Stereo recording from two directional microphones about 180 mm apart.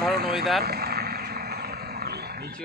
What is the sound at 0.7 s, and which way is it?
Wild animals, 60° right (ahead or behind).